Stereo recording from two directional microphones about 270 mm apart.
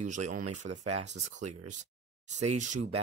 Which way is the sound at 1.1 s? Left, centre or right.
Right.